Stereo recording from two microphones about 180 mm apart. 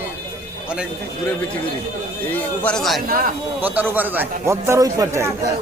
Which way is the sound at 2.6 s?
Centre (ahead or behind).